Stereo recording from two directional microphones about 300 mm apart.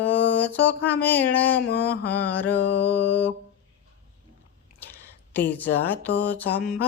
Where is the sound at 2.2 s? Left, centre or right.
Centre.